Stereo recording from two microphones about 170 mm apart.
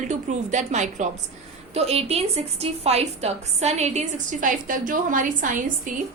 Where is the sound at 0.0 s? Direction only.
45° right (ahead or behind).